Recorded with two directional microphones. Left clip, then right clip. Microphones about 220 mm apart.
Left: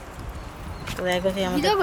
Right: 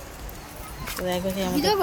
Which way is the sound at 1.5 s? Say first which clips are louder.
Right 1 dB; 50° left (ahead or behind).